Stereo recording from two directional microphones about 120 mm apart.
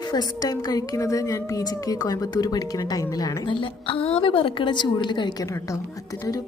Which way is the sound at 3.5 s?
45° left (ahead or behind).